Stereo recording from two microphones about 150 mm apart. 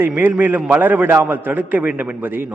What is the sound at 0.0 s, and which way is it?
A man's voice, 15° right (ahead or behind).